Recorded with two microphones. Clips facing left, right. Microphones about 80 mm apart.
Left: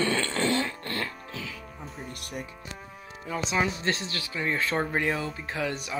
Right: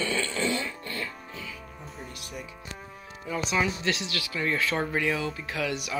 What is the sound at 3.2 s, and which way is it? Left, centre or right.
Speech, left.